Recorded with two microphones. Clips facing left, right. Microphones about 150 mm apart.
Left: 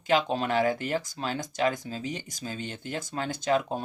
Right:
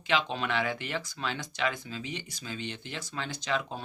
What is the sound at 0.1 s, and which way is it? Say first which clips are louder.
Speech: left 5 dB; 45° left (ahead or behind).